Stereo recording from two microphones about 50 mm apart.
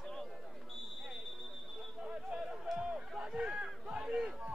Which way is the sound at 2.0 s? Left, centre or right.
Centre.